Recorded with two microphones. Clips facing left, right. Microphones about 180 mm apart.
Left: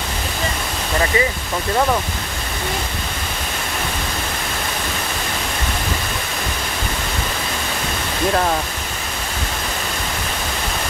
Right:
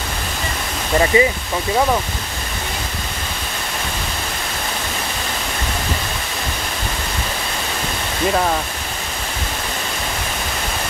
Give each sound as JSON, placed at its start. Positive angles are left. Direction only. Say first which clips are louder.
{"t": 1.1, "sound": "speech", "louder": "right 5 dB", "side_deg": -20}